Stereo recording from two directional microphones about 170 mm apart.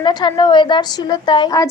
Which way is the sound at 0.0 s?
25° left (ahead or behind).